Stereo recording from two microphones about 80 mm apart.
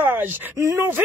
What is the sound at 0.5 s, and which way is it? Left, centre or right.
Speech, right.